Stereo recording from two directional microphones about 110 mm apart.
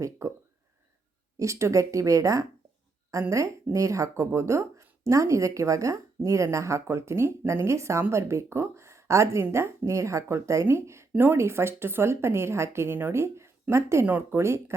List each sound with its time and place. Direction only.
0.0 s speech: 25° right (ahead or behind)
1.4 s speech: 25° right (ahead or behind)